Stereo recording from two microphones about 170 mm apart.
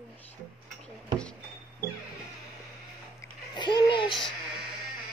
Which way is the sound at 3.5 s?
25° left (ahead or behind).